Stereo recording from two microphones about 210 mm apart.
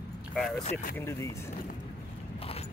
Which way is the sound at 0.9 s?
10° left (ahead or behind).